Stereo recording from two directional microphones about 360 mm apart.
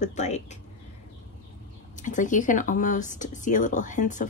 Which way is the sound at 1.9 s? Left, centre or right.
Left.